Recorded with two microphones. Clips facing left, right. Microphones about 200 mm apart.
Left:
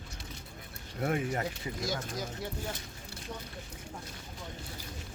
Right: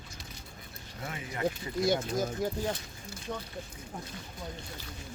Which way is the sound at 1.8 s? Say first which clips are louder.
Right 9 dB; 60° right (ahead or behind).